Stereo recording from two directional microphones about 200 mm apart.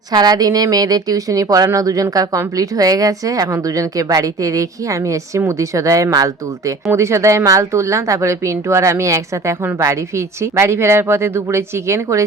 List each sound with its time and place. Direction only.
0.1 s speech: 20° right (ahead or behind)